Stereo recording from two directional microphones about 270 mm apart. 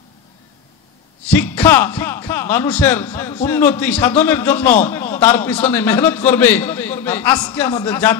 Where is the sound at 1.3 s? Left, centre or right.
Centre.